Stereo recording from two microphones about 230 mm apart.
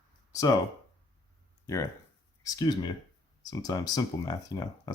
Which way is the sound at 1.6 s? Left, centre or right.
Centre.